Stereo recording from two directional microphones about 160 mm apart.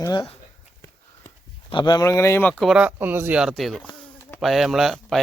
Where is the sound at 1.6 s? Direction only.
30° left (ahead or behind).